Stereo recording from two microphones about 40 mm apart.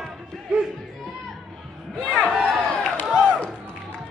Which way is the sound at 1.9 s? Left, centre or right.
Left.